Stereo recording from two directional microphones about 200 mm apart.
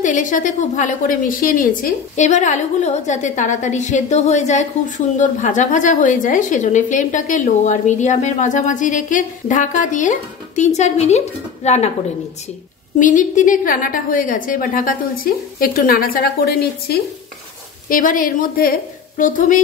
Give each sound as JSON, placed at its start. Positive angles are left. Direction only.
{"t": 0.0, "sound": "a woman's voice", "side_deg": 40}
{"t": 13.0, "sound": "a woman's voice", "side_deg": 40}